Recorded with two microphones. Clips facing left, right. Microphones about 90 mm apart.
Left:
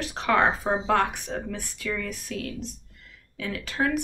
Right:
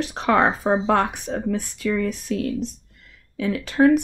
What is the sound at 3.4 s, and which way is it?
Speech, 25° right (ahead or behind).